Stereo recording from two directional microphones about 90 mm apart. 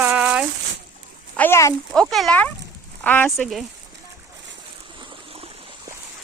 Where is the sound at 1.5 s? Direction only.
35° left (ahead or behind).